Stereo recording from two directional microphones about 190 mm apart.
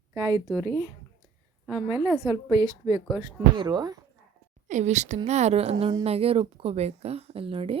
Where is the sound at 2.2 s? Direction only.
20° right (ahead or behind).